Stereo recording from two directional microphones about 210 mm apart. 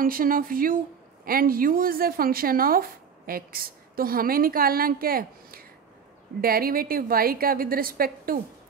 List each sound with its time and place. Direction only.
0.0 s a woman's voice: 40° right (ahead or behind)